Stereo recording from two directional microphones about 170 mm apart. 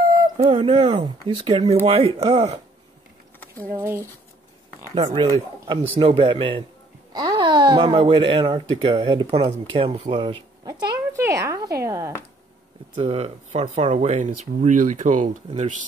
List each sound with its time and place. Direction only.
0.0 s a sound: 20° right (ahead or behind)
0.4 s speech: 35° right (ahead or behind)
3.3 s a sound: 10° left (ahead or behind)
3.8 s speech: 15° right (ahead or behind)
5.1 s speech: 25° right (ahead or behind)
13.0 s speech: 35° right (ahead or behind)